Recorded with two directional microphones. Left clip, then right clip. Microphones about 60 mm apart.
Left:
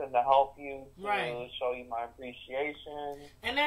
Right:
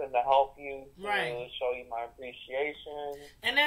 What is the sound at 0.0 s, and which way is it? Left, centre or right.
Speech, left.